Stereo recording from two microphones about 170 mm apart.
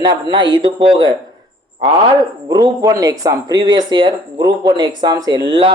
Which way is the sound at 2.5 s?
20° right (ahead or behind).